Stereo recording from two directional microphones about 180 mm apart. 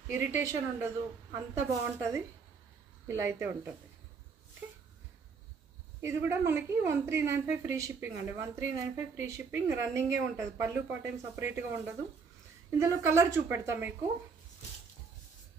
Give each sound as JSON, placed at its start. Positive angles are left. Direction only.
{"t": 0.1, "sound": "a woman's voice", "side_deg": -15}
{"t": 5.9, "sound": "a woman's voice", "side_deg": -15}